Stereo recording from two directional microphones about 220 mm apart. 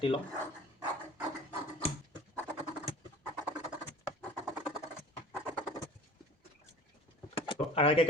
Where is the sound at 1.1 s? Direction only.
15° right (ahead or behind).